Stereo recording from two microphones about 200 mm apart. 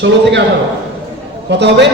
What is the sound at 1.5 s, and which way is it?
Speech, 60° right (ahead or behind).